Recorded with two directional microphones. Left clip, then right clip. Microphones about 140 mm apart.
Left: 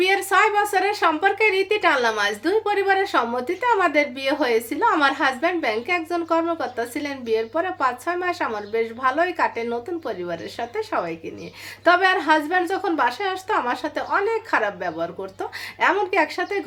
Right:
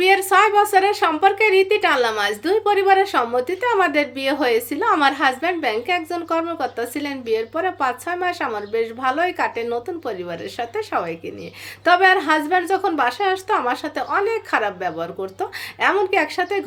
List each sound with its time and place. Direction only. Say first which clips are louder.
0.0 s a woman's voice: right 3 dB; 20° right (ahead or behind)